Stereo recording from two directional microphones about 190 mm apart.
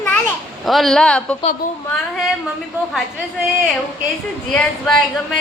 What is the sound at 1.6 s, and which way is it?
Speech, 45° left (ahead or behind).